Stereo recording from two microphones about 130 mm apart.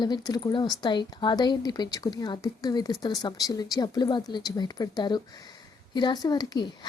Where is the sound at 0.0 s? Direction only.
35° left (ahead or behind).